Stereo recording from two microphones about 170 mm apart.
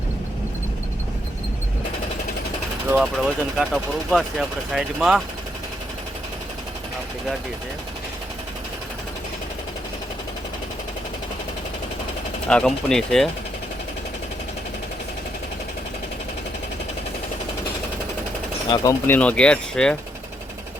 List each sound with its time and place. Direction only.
3.0 s speech: centre (ahead or behind)
12.5 s speech: 5° left (ahead or behind)
18.7 s speech: 25° left (ahead or behind)
19.0 s speech: 10° left (ahead or behind)